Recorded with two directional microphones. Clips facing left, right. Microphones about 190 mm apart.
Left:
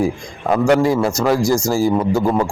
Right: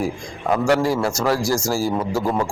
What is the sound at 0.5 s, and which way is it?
Speech, 20° left (ahead or behind).